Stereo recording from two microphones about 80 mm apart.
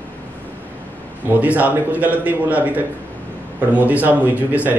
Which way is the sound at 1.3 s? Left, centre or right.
Centre.